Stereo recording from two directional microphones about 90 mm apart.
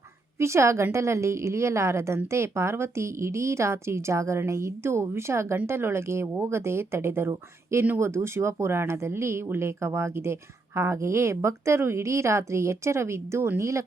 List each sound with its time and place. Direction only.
0.3 s a woman's voice: 30° right (ahead or behind)